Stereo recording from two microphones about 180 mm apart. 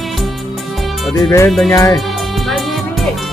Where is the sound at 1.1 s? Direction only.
15° left (ahead or behind).